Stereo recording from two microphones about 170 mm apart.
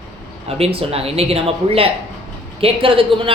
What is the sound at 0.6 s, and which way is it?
A woman's voice, 35° right (ahead or behind).